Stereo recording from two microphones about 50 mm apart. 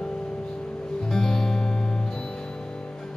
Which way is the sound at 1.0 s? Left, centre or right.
Centre.